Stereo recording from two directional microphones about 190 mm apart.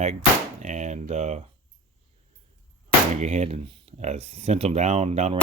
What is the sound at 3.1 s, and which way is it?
Speech, 35° right (ahead or behind).